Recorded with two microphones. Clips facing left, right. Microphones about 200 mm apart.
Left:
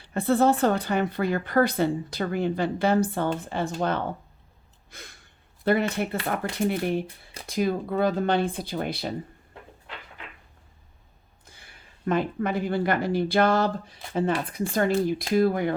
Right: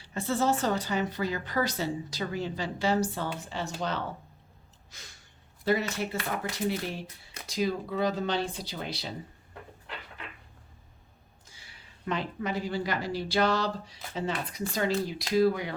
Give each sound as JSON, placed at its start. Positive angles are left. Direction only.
{"t": 0.0, "sound": "a woman's voice", "side_deg": 55}
{"t": 4.9, "sound": "gasp", "side_deg": 55}
{"t": 5.6, "sound": "a woman's voice", "side_deg": 55}
{"t": 11.4, "sound": "speech", "side_deg": 55}